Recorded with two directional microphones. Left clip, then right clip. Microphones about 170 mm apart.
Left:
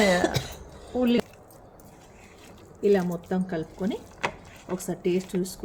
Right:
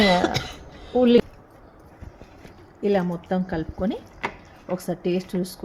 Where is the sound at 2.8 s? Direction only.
35° right (ahead or behind).